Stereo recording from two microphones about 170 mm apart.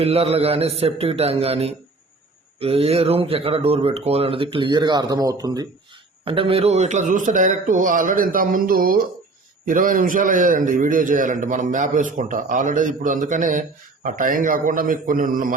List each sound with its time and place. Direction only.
0.0 s speech: 35° right (ahead or behind)
6.2 s a man's voice: 30° right (ahead or behind); by 15.5 s 55° right (ahead or behind)